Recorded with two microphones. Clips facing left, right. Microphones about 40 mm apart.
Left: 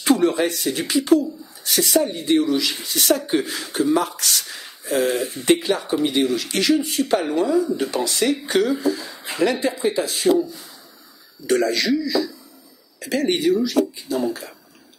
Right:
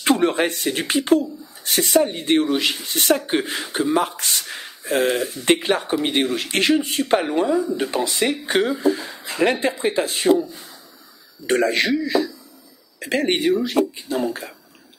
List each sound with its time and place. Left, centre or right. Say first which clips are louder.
0.0 s speech: even; right
11.4 s speech: right 1 dB; right